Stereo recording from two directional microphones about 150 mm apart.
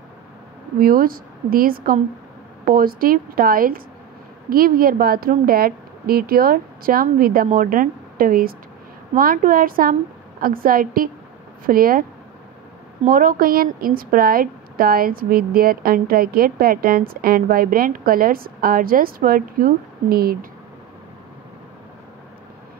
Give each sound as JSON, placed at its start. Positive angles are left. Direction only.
{"t": 0.7, "sound": "a woman's voice", "side_deg": -75}
{"t": 13.0, "sound": "a woman's voice", "side_deg": -70}